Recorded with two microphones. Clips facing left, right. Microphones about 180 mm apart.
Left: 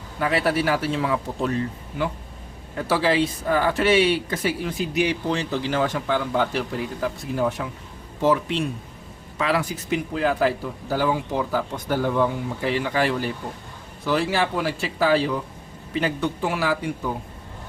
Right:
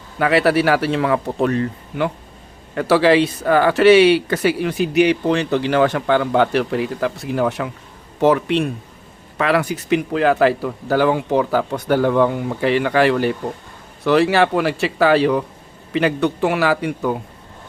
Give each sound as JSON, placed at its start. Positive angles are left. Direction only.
{"t": 0.2, "sound": "speech", "side_deg": -75}